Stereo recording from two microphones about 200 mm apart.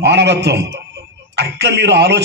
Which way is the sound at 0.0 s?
55° right (ahead or behind).